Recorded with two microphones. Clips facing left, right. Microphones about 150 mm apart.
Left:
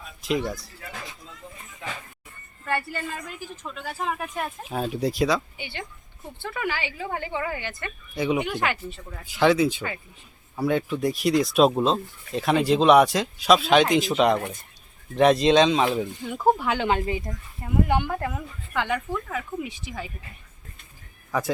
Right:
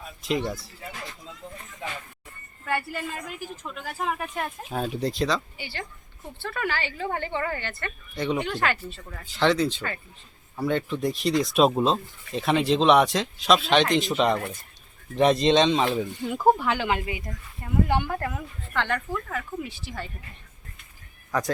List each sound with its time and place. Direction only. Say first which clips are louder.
0.2 s speech: left 1 dB; centre (ahead or behind)
2.6 s speech: left 1 dB; 5° right (ahead or behind)
5.5 s a woman's voice: even; 20° left (ahead or behind); by 14.1 s 5° left (ahead or behind)
15.1 s speech: left 2 dB; centre (ahead or behind)
16.6 s speech: left 2 dB; 15° left (ahead or behind)
18.1 s speech: left 1 dB; centre (ahead or behind)